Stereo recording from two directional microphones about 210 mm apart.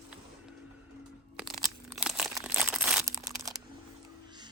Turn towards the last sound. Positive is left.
turn(degrees=-15)  # may be behind; listen again after turning